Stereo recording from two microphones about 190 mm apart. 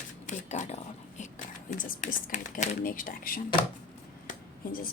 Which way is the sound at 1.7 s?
45° left (ahead or behind).